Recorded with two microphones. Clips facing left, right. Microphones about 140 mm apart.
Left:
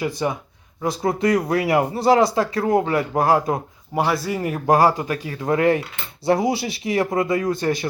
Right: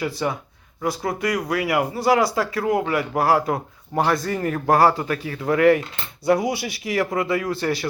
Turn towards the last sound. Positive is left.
turn(degrees=20)  # may be behind; listen again after turning